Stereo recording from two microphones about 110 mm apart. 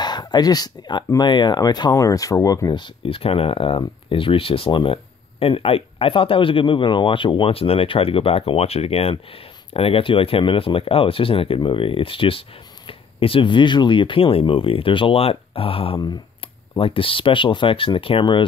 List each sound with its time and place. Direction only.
0.0 s speech: 40° left (ahead or behind)